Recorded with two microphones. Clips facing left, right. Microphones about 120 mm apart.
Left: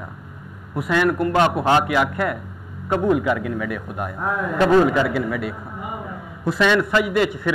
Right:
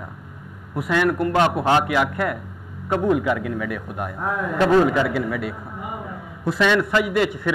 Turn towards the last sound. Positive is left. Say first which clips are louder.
# left 1 dB
turn(degrees=15)  # may be behind; listen again after turning